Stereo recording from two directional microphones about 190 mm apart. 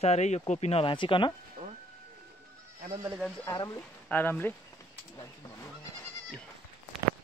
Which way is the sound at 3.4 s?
20° left (ahead or behind).